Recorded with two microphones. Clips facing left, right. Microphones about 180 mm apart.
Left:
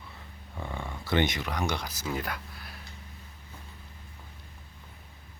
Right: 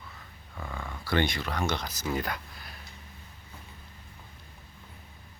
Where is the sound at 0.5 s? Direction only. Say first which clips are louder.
Left 2 dB; 20° left (ahead or behind).